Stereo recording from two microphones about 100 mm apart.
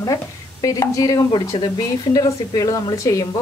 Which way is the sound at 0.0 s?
35° left (ahead or behind).